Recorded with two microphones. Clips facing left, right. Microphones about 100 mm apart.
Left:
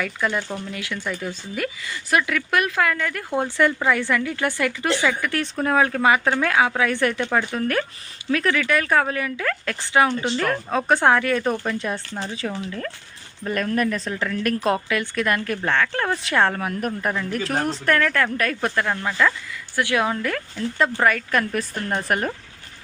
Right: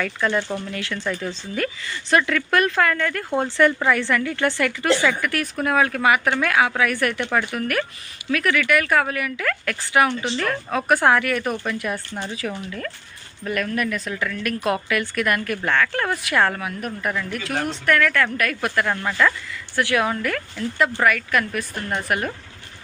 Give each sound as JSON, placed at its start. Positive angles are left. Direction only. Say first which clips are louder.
{"t": 0.0, "sound": "speech", "louder": "right 2 dB", "side_deg": 10}
{"t": 16.6, "sound": "speech", "louder": "left 3 dB", "side_deg": 40}
{"t": 17.1, "sound": "speech", "louder": "right 2 dB", "side_deg": 25}
{"t": 17.3, "sound": "speech", "louder": "left 2 dB", "side_deg": 40}
{"t": 18.9, "sound": "speech", "louder": "right 2 dB", "side_deg": 10}
{"t": 21.6, "sound": "a woman's voice", "louder": "left 1 dB", "side_deg": 0}